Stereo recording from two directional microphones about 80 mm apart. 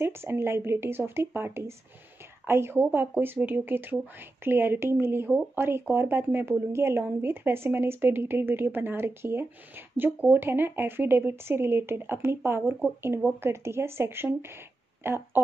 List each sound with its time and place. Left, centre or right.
0.0 s speech: right